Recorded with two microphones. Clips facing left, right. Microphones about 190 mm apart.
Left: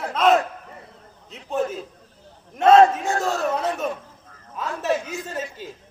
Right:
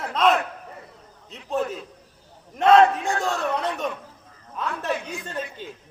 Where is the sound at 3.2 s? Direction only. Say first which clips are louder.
Left 3 dB; centre (ahead or behind).